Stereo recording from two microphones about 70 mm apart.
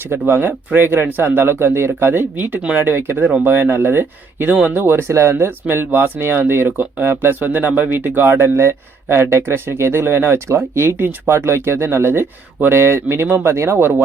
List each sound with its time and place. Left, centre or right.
0.1 s a man's voice: right